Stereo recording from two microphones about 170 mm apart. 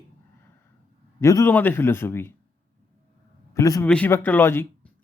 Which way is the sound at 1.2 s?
15° left (ahead or behind).